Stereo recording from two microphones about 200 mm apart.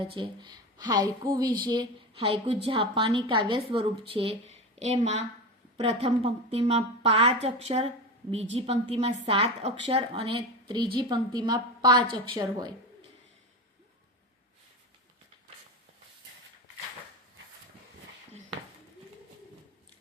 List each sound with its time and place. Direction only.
0.0 s a woman's voice: 25° right (ahead or behind)